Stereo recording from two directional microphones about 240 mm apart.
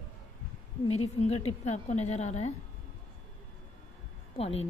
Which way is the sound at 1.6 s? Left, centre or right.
Left.